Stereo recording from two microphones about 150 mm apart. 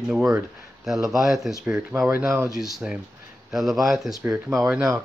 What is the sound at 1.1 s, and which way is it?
Speech, centre (ahead or behind).